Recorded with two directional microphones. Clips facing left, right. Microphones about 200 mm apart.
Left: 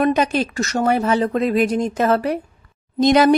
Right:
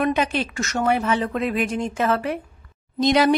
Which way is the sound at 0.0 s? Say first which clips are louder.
Left 4 dB; 40° left (ahead or behind).